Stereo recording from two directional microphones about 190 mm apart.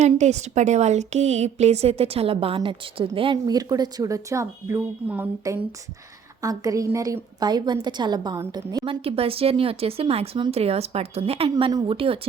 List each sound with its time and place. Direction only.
0.0 s a woman's voice: 35° right (ahead or behind)